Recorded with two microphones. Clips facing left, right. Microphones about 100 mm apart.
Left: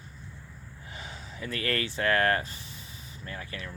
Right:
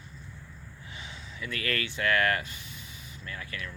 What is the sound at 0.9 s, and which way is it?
Speech, 40° left (ahead or behind).